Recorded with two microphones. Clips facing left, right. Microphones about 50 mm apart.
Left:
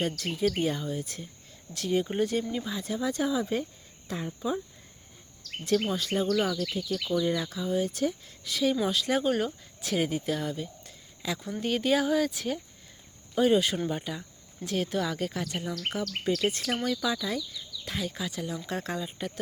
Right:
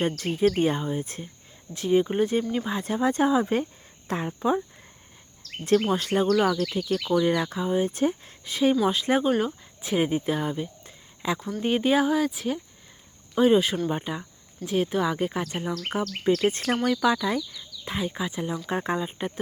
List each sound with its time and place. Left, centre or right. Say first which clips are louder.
0.0 s speech: right 5 dB; right
1.7 s speech: right 6 dB; centre
2.5 s speech: right 5 dB; right
4.3 s speech: right 7 dB; right
5.9 s speech: right 5 dB; right
7.6 s speech: right 3 dB; right
9.2 s speech: right 3 dB; centre